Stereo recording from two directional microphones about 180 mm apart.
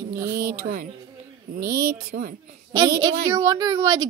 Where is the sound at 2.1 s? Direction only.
50° right (ahead or behind).